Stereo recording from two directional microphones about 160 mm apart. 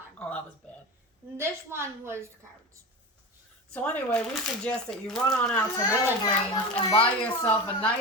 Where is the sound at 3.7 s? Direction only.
10° left (ahead or behind).